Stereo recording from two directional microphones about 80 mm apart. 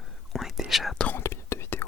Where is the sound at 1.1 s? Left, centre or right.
Left.